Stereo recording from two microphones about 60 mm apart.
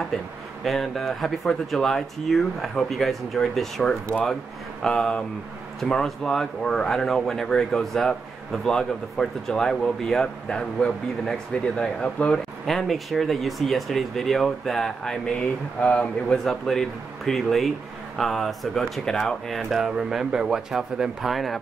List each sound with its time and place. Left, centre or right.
0.7 s a man's voice: centre
12.6 s a man's voice: centre
15.8 s speech: left
16.4 s a man's voice: centre